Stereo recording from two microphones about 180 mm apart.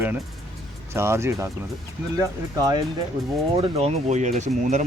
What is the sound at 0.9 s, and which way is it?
Speech, 15° right (ahead or behind).